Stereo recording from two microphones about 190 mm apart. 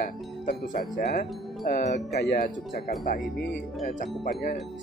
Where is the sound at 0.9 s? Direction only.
55° left (ahead or behind).